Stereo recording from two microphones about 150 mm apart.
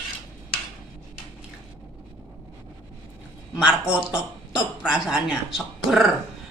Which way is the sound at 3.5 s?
5° right (ahead or behind).